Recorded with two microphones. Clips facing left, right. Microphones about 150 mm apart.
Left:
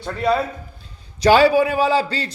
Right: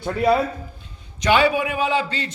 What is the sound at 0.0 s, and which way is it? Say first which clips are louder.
Speech: right 2 dB; 5° right (ahead or behind).